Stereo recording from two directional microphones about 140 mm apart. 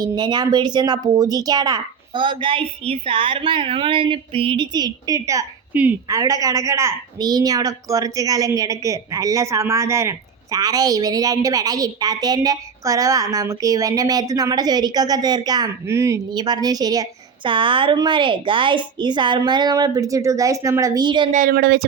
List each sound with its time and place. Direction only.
0.0 s speech: 30° right (ahead or behind)
5.7 s a woman's voice: 10° right (ahead or behind)
6.1 s a woman's voice: 25° right (ahead or behind)
17.5 s speech: 35° right (ahead or behind)
21.3 s speech: 85° right